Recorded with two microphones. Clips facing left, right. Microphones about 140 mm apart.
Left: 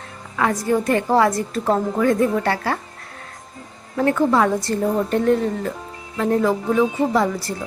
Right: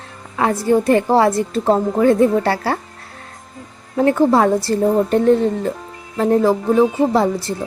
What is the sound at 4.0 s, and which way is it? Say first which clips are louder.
A woman's voice: right 4 dB; 30° right (ahead or behind).